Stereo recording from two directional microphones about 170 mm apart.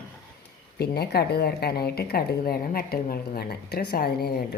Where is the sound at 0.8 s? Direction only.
65° left (ahead or behind).